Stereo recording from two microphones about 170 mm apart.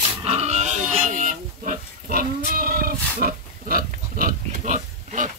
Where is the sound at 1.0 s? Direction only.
50° right (ahead or behind).